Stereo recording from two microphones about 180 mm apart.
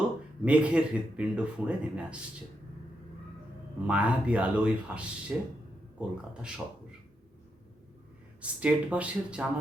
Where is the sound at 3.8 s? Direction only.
5° right (ahead or behind).